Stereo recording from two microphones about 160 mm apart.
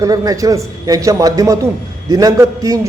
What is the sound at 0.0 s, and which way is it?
A man's voice, 20° right (ahead or behind).